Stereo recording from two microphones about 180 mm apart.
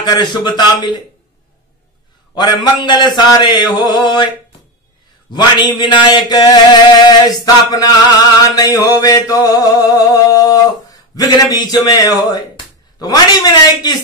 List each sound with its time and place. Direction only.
0.0 s a man's voice: 25° left (ahead or behind)
2.3 s a man's voice: 25° left (ahead or behind)
8.5 s a sound: 20° left (ahead or behind)
13.0 s a man's voice: 20° left (ahead or behind)